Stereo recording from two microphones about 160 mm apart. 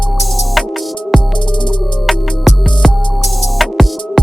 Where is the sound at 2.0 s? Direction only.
5° left (ahead or behind).